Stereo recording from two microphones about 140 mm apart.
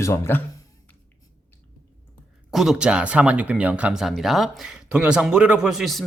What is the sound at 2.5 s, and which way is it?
Speech, 5° right (ahead or behind).